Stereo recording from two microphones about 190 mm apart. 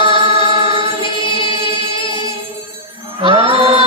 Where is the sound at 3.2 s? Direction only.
30° right (ahead or behind).